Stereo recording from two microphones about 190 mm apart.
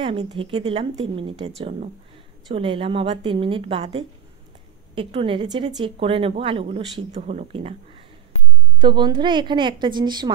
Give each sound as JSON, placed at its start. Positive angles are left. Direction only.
{"t": 0.0, "sound": "speech", "side_deg": -25}
{"t": 8.7, "sound": "speech", "side_deg": -25}